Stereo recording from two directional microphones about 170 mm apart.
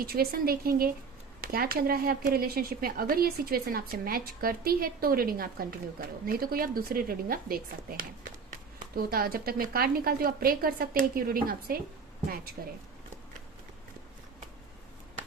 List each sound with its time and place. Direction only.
0.0 s a woman's voice: 60° right (ahead or behind)